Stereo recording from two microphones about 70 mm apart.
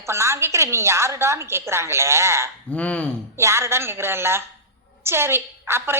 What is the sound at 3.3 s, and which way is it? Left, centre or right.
A woman's voice, right.